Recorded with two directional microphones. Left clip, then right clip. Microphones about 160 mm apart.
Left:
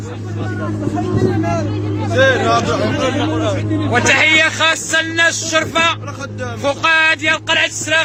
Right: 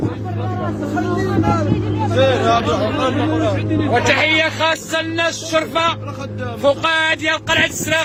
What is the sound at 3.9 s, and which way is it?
A man's voice, 15° right (ahead or behind).